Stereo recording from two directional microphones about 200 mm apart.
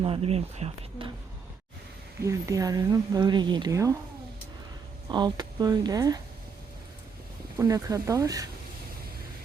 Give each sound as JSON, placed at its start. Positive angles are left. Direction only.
{"t": 0.0, "sound": "speech", "side_deg": -30}
{"t": 2.2, "sound": "speech", "side_deg": -15}
{"t": 5.0, "sound": "speech", "side_deg": -20}
{"t": 7.5, "sound": "speech", "side_deg": -20}